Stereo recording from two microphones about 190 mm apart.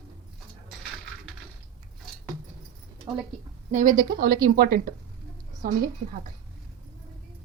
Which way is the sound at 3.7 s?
45° right (ahead or behind).